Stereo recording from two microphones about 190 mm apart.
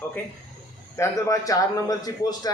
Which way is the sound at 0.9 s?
15° left (ahead or behind).